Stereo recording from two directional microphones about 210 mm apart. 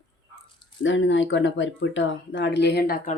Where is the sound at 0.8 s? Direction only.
65° left (ahead or behind); by 3.2 s 45° left (ahead or behind).